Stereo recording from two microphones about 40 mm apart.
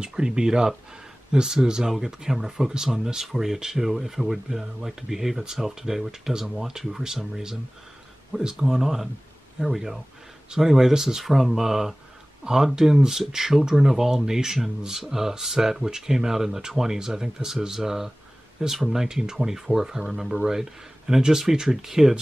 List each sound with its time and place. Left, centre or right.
0.0 s speech: centre